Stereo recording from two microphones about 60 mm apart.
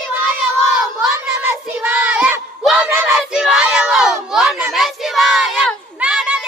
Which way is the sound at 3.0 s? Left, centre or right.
Centre.